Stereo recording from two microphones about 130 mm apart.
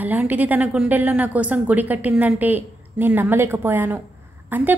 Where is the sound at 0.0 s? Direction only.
15° right (ahead or behind).